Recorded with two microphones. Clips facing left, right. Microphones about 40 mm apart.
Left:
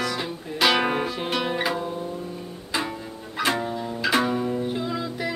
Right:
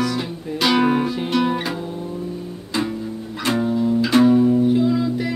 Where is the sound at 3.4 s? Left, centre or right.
Centre.